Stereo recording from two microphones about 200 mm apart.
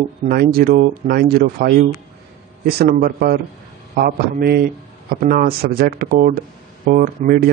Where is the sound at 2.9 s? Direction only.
50° right (ahead or behind).